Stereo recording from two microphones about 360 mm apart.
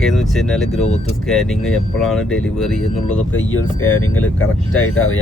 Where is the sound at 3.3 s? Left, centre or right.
Left.